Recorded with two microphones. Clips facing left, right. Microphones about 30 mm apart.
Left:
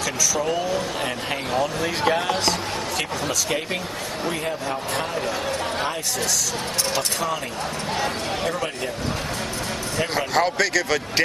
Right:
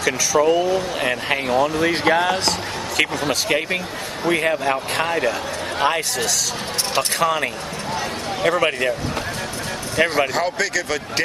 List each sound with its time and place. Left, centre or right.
0.0 s a man's voice: right
1.8 s speech: right
4.2 s a man's voice: right
8.4 s speech: right
10.0 s speech: centre